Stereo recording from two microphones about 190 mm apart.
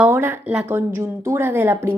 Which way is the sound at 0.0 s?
10° right (ahead or behind).